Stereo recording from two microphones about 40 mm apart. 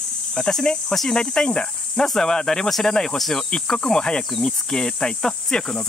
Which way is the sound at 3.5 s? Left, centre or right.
Left.